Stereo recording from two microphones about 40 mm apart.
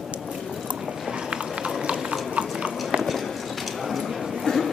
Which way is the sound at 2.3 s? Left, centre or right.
Right.